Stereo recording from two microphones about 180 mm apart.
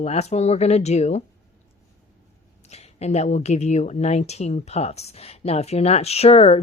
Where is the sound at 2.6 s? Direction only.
35° left (ahead or behind).